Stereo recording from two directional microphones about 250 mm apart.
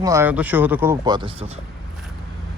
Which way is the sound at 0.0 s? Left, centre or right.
Centre.